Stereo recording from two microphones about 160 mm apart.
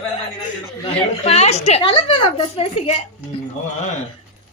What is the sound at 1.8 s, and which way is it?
Speech, 30° left (ahead or behind).